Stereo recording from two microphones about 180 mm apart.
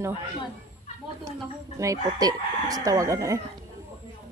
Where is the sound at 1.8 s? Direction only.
20° right (ahead or behind).